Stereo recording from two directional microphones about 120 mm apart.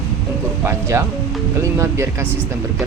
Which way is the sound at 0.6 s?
20° right (ahead or behind).